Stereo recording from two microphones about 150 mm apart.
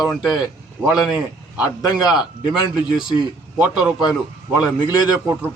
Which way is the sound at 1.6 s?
25° left (ahead or behind).